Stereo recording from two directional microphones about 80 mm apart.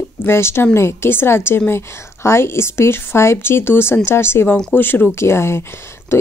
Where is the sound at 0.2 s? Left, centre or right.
Left.